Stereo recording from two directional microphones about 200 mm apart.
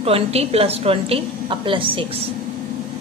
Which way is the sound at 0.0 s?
30° right (ahead or behind).